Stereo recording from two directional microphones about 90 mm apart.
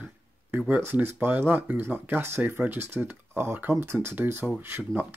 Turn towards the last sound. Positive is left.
turn(degrees=-20)  # may be behind; listen again after turning